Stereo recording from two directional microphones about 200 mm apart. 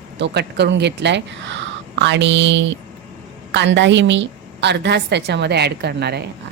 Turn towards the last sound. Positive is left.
turn(degrees=-55)  # may be behind; listen again after turning